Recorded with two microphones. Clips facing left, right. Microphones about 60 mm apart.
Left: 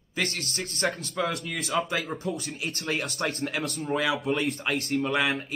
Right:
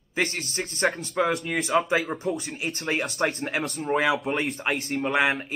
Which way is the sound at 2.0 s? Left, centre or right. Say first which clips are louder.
Right 4 dB; right.